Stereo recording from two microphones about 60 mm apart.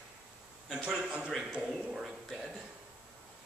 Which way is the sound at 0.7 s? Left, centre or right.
Centre.